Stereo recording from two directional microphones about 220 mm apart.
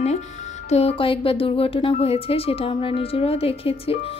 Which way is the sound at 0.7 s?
30° left (ahead or behind).